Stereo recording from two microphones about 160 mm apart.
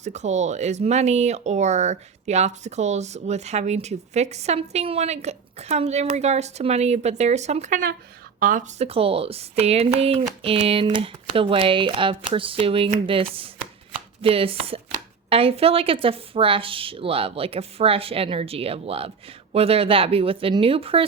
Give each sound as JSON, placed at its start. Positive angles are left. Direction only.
{"t": 0.0, "sound": "speech", "side_deg": -45}
{"t": 8.8, "sound": "a woman's voice", "side_deg": -35}